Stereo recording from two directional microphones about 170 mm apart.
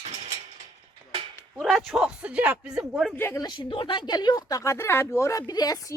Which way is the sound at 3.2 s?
15° left (ahead or behind).